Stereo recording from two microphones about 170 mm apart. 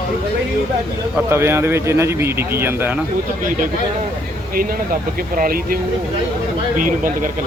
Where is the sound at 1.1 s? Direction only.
15° right (ahead or behind).